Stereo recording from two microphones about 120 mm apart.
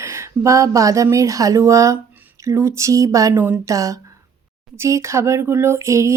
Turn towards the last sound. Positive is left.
turn(degrees=-25)  # may be behind; listen again after turning